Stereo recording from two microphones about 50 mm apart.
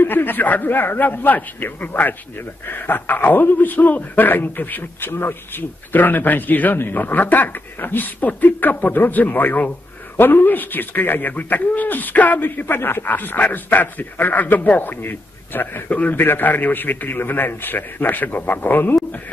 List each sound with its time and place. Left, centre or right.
0.0 s a man's voice: left
15.9 s a man's voice: left
16.2 s a man's voice: left